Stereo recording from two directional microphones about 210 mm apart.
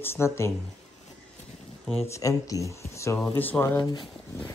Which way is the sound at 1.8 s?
15° left (ahead or behind).